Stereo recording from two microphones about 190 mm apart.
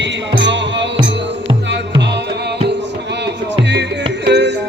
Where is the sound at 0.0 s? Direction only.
70° right (ahead or behind).